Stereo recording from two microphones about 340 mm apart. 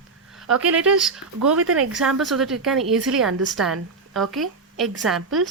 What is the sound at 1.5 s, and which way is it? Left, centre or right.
Speech, right.